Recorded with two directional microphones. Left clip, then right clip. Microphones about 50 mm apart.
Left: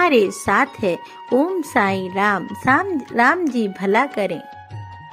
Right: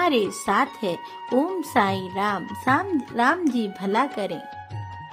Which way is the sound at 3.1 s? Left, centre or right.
Left.